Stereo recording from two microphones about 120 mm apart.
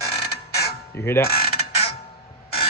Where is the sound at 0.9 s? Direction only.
20° left (ahead or behind).